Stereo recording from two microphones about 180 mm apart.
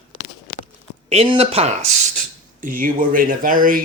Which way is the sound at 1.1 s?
30° right (ahead or behind).